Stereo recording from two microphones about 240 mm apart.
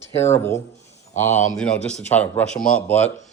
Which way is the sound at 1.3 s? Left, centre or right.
Left.